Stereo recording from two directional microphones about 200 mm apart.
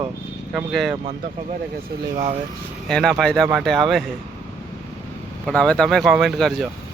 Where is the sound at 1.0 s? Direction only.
30° right (ahead or behind).